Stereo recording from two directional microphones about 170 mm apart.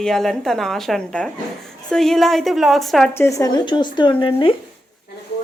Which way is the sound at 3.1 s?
15° left (ahead or behind).